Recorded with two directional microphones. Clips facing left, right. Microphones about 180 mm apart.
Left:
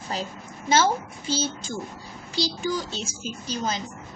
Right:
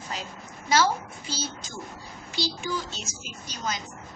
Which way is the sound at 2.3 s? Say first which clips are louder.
Left 4 dB; 35° left (ahead or behind).